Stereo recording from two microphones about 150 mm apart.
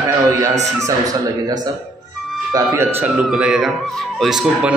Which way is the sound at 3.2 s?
5° right (ahead or behind).